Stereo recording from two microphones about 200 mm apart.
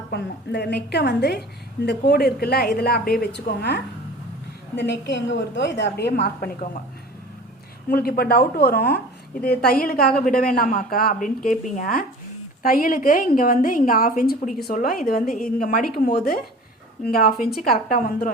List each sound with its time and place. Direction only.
0.1 s a woman's voice: 55° left (ahead or behind)
7.9 s a woman's voice: 50° left (ahead or behind)
15.3 s a woman's voice: centre (ahead or behind)
15.5 s a woman's voice: 40° left (ahead or behind)